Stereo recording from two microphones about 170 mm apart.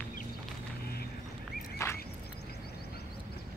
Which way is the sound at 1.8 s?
15° left (ahead or behind).